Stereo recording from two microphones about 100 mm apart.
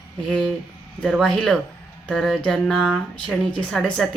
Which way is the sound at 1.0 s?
10° right (ahead or behind).